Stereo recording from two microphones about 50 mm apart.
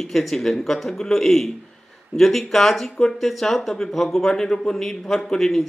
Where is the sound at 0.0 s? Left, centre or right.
Centre.